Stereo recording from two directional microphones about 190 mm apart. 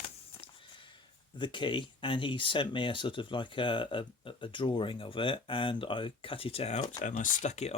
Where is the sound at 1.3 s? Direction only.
25° left (ahead or behind).